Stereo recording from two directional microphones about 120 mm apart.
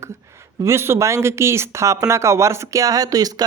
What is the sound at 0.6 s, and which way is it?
Speech, 20° right (ahead or behind).